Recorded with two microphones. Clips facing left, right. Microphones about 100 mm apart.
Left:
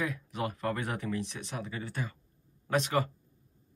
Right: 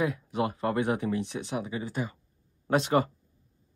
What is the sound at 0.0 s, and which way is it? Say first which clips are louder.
Speech: right 6 dB; 30° right (ahead or behind).